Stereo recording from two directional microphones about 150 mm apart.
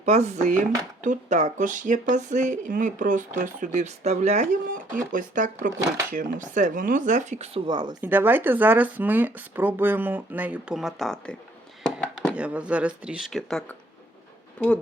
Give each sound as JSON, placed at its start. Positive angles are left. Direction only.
{"t": 0.0, "sound": "speech", "side_deg": -50}
{"t": 4.9, "sound": "speech", "side_deg": -60}
{"t": 7.7, "sound": "speech", "side_deg": -30}
{"t": 8.0, "sound": "speech", "side_deg": -15}
{"t": 11.8, "sound": "a sound", "side_deg": 5}
{"t": 12.3, "sound": "speech", "side_deg": -10}